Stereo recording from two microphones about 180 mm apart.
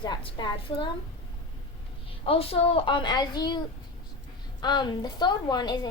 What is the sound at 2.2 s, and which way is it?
A woman's voice, 30° left (ahead or behind).